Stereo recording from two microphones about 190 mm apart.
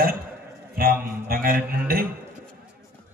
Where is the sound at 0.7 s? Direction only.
50° right (ahead or behind).